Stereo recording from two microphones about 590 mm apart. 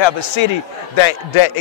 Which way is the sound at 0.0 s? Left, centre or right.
Left.